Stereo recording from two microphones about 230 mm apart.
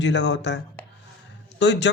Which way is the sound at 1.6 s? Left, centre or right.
Left.